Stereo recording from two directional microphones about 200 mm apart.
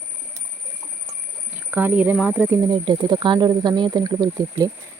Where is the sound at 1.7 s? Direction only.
5° right (ahead or behind).